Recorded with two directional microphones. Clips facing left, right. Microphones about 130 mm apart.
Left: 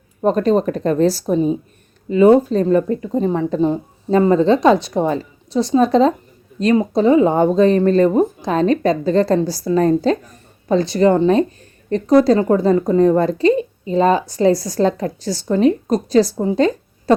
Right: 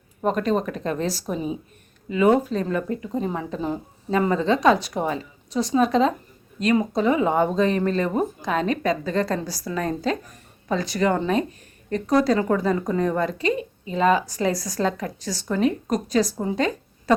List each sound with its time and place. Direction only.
0.2 s a woman's voice: 35° left (ahead or behind)